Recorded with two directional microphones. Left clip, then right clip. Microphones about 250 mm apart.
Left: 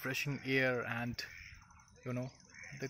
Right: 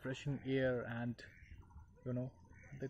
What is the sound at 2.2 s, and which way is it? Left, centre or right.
Crow, centre.